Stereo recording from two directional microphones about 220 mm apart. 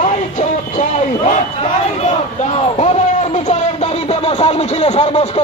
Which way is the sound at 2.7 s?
30° left (ahead or behind).